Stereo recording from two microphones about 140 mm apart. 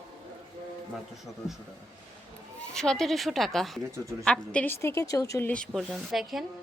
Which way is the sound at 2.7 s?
5° left (ahead or behind).